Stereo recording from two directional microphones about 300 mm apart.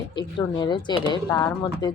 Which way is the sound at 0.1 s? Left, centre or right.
Centre.